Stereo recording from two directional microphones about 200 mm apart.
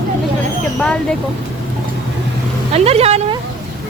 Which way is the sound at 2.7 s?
30° right (ahead or behind).